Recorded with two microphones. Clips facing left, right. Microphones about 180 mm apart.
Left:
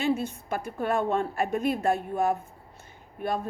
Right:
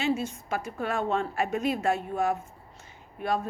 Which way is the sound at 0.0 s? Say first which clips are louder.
Left 1 dB; 55° left (ahead or behind).